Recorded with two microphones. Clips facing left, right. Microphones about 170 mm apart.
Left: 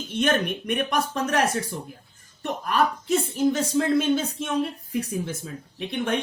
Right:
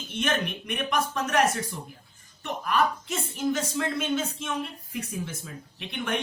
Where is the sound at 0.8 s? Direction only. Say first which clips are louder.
Even; 35° left (ahead or behind).